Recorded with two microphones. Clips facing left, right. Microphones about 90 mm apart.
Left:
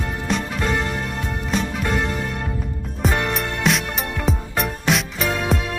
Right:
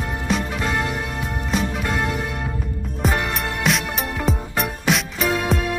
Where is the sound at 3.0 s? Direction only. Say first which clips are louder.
Left 1 dB; centre (ahead or behind).